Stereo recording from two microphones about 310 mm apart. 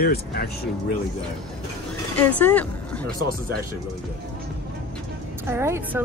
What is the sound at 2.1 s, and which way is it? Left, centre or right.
Speech, centre.